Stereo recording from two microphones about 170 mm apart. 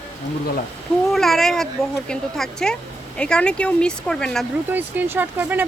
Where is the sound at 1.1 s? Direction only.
Centre (ahead or behind).